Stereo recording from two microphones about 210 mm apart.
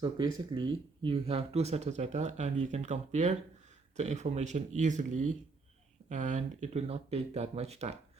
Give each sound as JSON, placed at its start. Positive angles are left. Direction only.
{"t": 0.0, "sound": "speech", "side_deg": -20}